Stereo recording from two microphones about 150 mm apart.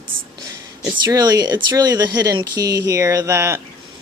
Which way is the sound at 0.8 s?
25° right (ahead or behind).